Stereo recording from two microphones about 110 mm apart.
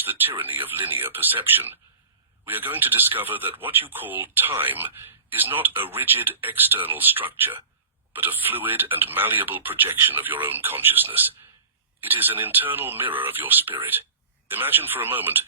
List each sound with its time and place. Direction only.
0.0 s speech: 20° right (ahead or behind)